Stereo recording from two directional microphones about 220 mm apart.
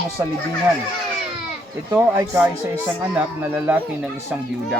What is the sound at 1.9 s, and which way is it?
Speech, 10° right (ahead or behind).